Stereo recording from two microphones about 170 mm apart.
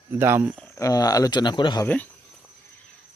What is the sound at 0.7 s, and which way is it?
Speech, 20° left (ahead or behind).